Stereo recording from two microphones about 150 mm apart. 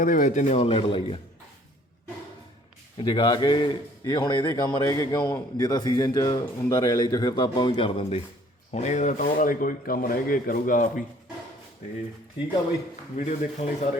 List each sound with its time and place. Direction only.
0.0 s a man's voice: 60° left (ahead or behind); by 1.2 s 35° left (ahead or behind)
3.0 s a man's voice: 30° left (ahead or behind)
8.7 s speech: 50° left (ahead or behind)
13.1 s a man's voice: 50° left (ahead or behind)